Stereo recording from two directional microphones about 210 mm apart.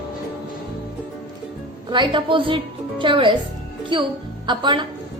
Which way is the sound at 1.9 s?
20° right (ahead or behind).